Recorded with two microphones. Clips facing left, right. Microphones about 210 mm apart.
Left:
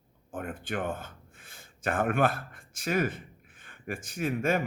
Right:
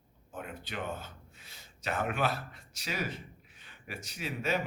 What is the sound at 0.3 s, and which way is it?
Speech, 50° left (ahead or behind).